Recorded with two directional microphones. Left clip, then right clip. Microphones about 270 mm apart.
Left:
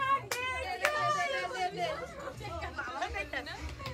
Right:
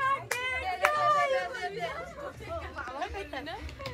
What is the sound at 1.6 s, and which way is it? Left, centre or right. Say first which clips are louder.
Chatter: left 1 dB; centre.